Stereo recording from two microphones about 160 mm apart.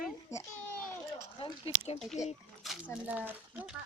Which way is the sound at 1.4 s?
35° left (ahead or behind).